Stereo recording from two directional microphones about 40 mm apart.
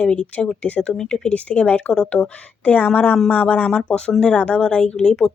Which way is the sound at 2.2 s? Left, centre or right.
Left.